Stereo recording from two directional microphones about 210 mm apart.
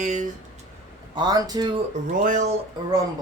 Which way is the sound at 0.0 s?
35° right (ahead or behind).